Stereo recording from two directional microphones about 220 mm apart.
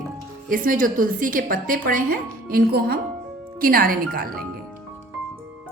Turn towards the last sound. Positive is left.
turn(degrees=-40)  # may be behind; listen again after turning